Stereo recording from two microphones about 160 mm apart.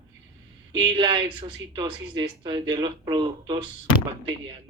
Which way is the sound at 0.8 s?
30° right (ahead or behind).